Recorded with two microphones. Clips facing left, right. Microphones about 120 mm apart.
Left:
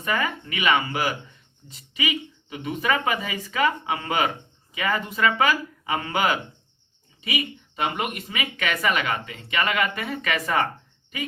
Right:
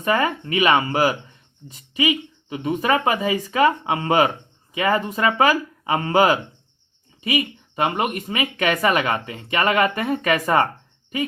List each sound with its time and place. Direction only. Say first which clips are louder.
0.0 s speech: right 6 dB; 40° right (ahead or behind)